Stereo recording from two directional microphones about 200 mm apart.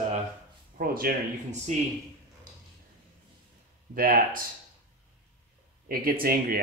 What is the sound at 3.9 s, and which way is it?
Speech, 45° right (ahead or behind).